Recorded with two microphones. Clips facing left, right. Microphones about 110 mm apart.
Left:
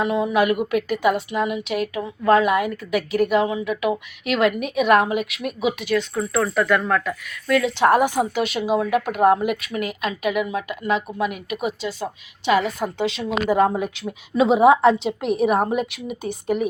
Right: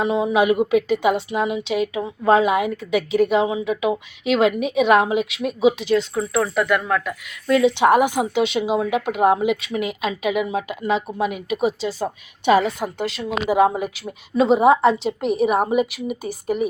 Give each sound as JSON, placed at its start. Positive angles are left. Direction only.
{"t": 0.0, "sound": "a woman's voice", "side_deg": -20}
{"t": 7.4, "sound": "a woman's voice", "side_deg": -20}
{"t": 9.6, "sound": "a woman's voice", "side_deg": -25}
{"t": 12.8, "sound": "a woman's voice", "side_deg": 0}